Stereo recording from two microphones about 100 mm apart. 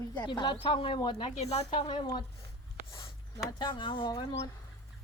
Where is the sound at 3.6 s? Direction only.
55° left (ahead or behind).